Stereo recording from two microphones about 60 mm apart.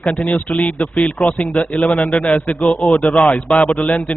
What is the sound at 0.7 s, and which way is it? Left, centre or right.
A man's voice, centre.